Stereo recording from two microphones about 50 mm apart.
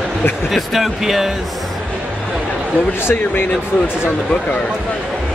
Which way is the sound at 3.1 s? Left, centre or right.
Left.